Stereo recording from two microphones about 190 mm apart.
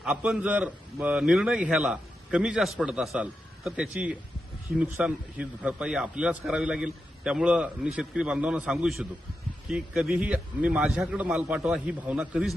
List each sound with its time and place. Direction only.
0.0 s a man's voice: centre (ahead or behind)